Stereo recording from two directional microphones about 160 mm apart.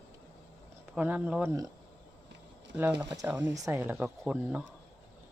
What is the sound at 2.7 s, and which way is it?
Speech, 10° right (ahead or behind).